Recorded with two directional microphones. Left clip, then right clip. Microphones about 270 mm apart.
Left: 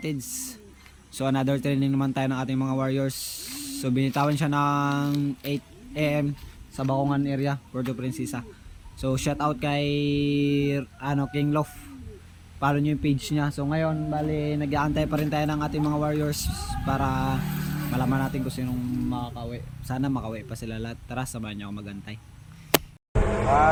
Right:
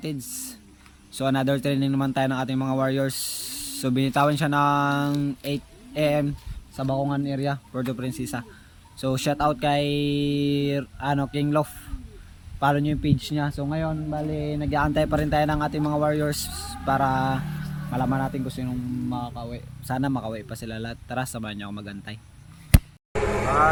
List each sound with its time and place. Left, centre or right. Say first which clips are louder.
0.0 s speech: left 1 dB; centre
17.4 s vehicle: left 4 dB; left
17.9 s speech: right 2 dB; centre